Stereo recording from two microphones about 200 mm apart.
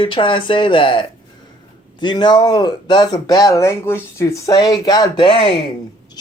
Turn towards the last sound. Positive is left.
turn(degrees=25)  # may be behind; listen again after turning